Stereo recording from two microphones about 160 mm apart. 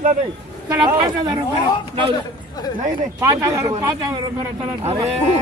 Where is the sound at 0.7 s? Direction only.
25° right (ahead or behind).